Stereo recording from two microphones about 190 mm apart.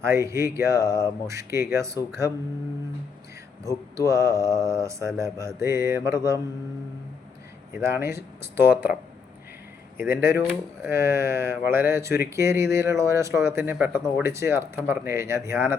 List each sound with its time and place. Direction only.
0.0 s speech: 15° right (ahead or behind)
3.6 s speech: 15° right (ahead or behind)
7.7 s speech: 15° right (ahead or behind)
10.0 s speech: 15° right (ahead or behind)